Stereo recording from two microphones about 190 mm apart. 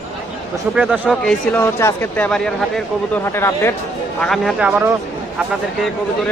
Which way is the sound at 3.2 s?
15° left (ahead or behind).